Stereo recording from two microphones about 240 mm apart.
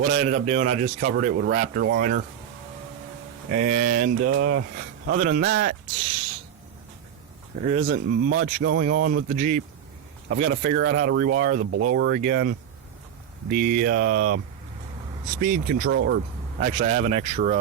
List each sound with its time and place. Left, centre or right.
0.1 s speech: right
3.5 s speech: right
7.6 s speech: right
16.6 s speech: right